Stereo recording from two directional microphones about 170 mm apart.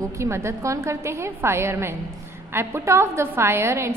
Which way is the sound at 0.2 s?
15° right (ahead or behind).